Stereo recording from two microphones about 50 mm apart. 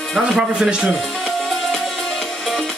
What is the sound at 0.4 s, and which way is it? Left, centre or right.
Music, centre.